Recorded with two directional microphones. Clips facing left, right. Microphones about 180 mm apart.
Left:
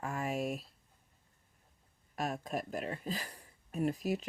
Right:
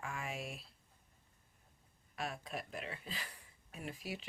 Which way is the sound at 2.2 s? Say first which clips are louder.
Left 7 dB; 45° left (ahead or behind).